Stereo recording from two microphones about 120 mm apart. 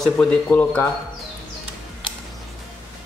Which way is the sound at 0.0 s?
5° left (ahead or behind).